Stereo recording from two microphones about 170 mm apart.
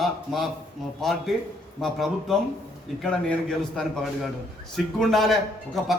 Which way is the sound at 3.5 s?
5° left (ahead or behind).